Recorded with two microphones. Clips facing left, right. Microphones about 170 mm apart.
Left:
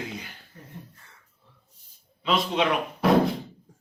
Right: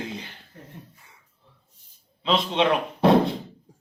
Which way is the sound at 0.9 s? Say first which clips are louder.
Even; 15° right (ahead or behind).